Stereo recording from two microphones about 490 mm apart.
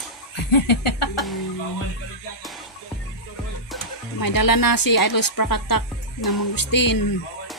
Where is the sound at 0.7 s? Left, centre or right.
Left.